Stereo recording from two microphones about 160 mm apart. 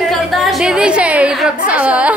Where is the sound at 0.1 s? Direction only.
Centre (ahead or behind).